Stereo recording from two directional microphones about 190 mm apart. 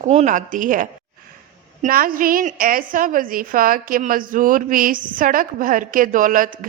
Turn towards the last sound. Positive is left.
turn(degrees=-45)  # may be behind; listen again after turning